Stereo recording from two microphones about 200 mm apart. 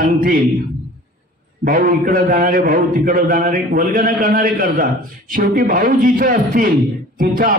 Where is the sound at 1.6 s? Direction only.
45° right (ahead or behind).